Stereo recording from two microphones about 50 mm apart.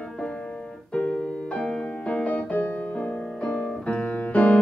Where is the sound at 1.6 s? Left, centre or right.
Left.